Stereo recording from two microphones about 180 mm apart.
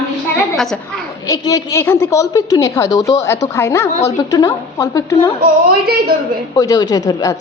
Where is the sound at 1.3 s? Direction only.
20° left (ahead or behind).